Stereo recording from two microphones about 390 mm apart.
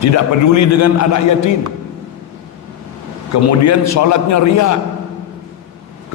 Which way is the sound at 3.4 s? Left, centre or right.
Left.